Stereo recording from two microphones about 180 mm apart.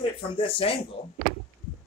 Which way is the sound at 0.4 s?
30° left (ahead or behind).